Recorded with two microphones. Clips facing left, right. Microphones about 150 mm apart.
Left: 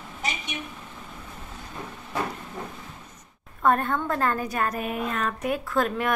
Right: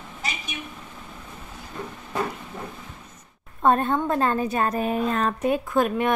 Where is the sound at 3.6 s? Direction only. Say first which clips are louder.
Right 3 dB; 20° right (ahead or behind).